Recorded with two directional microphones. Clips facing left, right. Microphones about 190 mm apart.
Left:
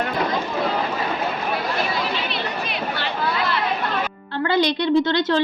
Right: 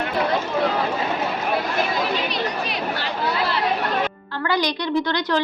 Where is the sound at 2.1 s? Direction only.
40° right (ahead or behind).